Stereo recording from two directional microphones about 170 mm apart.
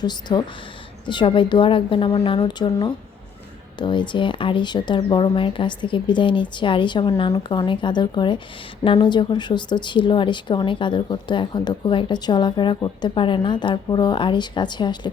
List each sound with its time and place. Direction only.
0.0 s speech: 25° left (ahead or behind)